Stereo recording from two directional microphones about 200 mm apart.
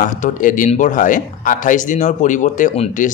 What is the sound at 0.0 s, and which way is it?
Speech, 40° left (ahead or behind).